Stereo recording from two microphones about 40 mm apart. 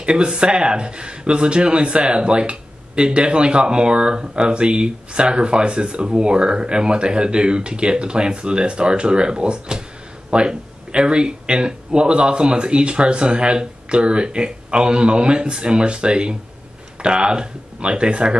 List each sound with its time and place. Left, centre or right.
0.0 s speech: right